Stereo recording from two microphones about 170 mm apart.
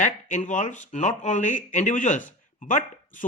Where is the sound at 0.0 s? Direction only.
45° left (ahead or behind).